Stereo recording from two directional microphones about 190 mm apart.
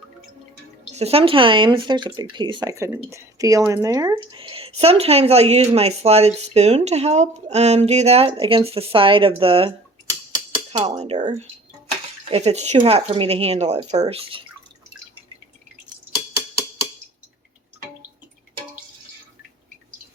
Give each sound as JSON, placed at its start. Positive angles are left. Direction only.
{"t": 0.9, "sound": "speech", "side_deg": -35}
{"t": 12.3, "sound": "speech", "side_deg": -35}